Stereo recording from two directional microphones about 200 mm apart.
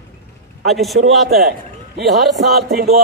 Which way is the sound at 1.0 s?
50° right (ahead or behind).